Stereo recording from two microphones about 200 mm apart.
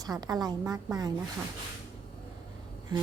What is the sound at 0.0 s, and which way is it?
A woman's voice, 20° right (ahead or behind).